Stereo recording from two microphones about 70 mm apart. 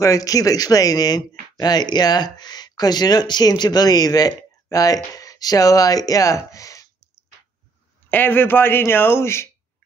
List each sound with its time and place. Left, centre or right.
0.0 s speech: left
8.1 s speech: left